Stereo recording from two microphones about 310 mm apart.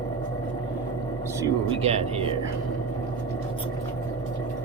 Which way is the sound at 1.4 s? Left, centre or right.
Centre.